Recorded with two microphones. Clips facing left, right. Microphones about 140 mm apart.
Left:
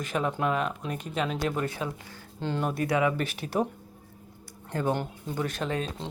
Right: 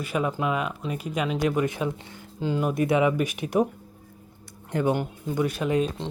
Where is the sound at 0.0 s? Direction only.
10° right (ahead or behind).